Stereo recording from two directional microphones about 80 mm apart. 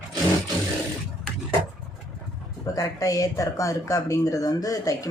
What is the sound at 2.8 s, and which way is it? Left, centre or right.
Speech, left.